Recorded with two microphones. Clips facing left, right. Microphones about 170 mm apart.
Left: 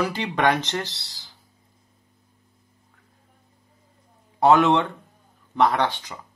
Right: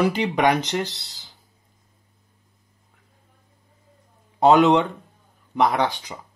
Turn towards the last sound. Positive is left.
turn(degrees=-15)  # may be behind; listen again after turning